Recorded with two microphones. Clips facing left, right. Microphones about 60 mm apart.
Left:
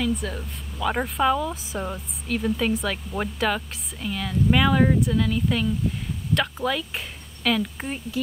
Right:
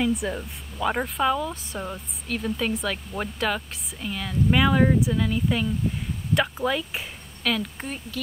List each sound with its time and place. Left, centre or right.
0.0 s speech: centre
0.9 s speech: centre
7.4 s speech: centre